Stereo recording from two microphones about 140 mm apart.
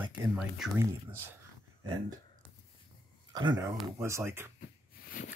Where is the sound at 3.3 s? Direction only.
35° right (ahead or behind).